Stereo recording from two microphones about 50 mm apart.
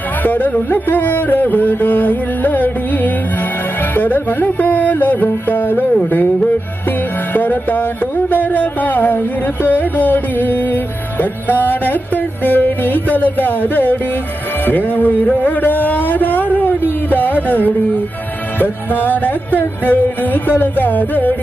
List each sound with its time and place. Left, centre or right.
0.2 s music: left
7.3 s music: left
15.4 s a sound: left
17.1 s music: left